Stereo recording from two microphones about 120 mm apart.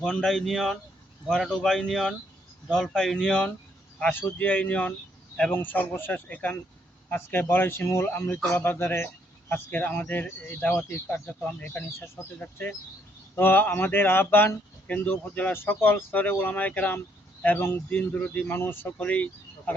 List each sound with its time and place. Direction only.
0.0 s speech: 5° left (ahead or behind)